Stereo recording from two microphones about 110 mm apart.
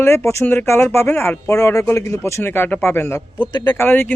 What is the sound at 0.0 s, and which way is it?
Speech, 20° left (ahead or behind).